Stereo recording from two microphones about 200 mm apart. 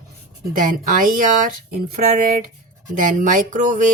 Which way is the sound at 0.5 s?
45° right (ahead or behind).